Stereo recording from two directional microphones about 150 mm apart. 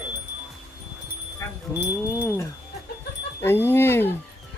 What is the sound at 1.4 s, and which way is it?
Wind chime, 20° left (ahead or behind).